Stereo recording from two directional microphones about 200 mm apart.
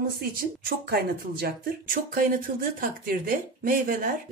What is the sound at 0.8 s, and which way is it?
Speech, 50° right (ahead or behind).